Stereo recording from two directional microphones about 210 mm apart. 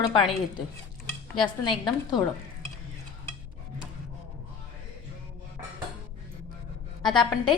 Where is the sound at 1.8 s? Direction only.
20° left (ahead or behind).